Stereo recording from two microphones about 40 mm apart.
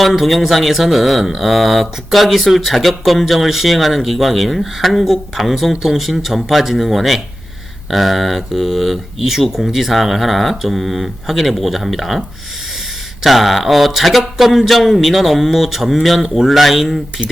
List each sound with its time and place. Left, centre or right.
0.0 s speech: centre
13.2 s speech: centre